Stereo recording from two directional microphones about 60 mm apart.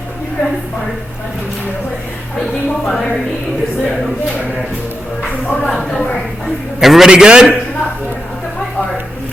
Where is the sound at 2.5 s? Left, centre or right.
Centre.